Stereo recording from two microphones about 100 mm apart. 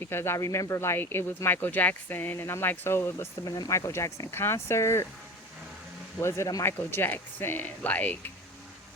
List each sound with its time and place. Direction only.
0.0 s speech: 25° left (ahead or behind)
6.1 s speech: 25° left (ahead or behind)